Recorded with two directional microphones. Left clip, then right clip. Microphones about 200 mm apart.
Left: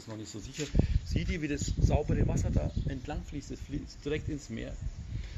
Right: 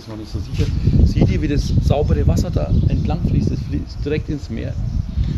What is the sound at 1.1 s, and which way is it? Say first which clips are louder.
Speech: right 11 dB; 25° left (ahead or behind).